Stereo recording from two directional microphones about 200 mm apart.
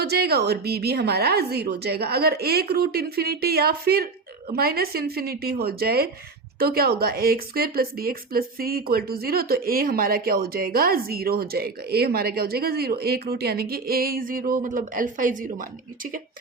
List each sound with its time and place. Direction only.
0.0 s speech: 50° right (ahead or behind)